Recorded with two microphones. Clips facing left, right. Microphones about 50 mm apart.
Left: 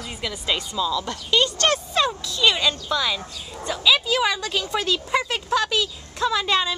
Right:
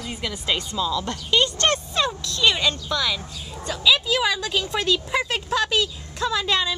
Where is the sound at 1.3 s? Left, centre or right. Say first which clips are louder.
Even; right.